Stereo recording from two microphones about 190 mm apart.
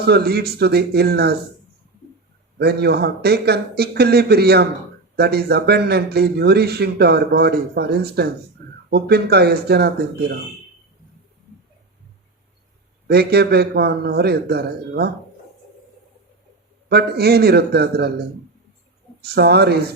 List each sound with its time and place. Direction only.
0.0 s a man's voice: 55° right (ahead or behind)
2.6 s a man's voice: 60° right (ahead or behind)
13.1 s a man's voice: 55° right (ahead or behind)
16.9 s a man's voice: 60° right (ahead or behind)